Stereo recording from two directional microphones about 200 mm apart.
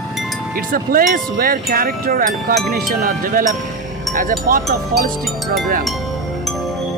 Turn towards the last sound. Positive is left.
turn(degrees=-45)  # may be behind; listen again after turning